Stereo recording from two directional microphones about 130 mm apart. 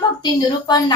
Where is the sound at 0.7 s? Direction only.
30° left (ahead or behind).